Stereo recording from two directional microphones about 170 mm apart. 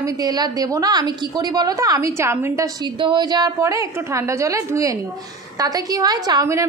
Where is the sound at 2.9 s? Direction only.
30° right (ahead or behind).